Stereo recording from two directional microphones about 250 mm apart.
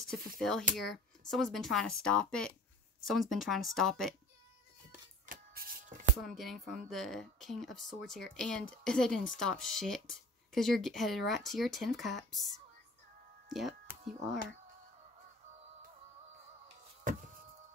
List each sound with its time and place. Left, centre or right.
0.4 s speech: centre
5.2 s shuffling cards: right
6.2 s speech: centre
13.5 s speech: centre
16.6 s a sound: right